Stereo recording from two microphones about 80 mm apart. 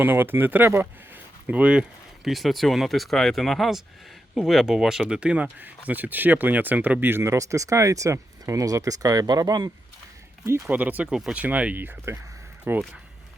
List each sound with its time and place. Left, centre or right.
0.0 s speech: right
10.7 s speech: centre